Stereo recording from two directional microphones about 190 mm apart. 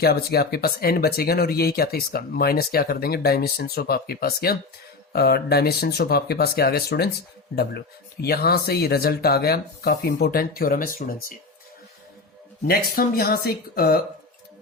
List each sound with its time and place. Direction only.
0.0 s speech: 55° left (ahead or behind)
12.6 s speech: 50° left (ahead or behind)